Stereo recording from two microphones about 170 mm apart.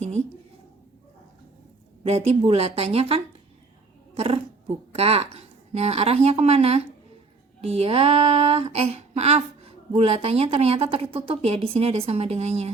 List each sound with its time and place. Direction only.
2.0 s speech: 40° right (ahead or behind)